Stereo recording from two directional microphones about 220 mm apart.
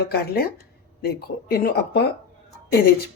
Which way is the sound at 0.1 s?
45° left (ahead or behind).